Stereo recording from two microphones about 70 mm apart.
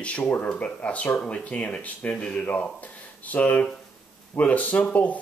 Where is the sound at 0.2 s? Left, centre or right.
Left.